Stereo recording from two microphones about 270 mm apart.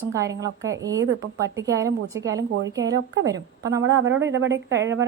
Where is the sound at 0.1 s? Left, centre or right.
Centre.